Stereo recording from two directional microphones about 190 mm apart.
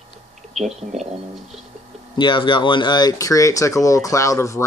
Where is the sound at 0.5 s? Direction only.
Centre (ahead or behind).